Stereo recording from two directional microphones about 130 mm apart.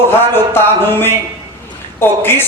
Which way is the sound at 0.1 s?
15° left (ahead or behind).